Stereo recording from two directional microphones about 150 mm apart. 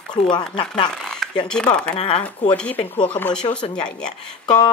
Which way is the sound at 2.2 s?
10° left (ahead or behind).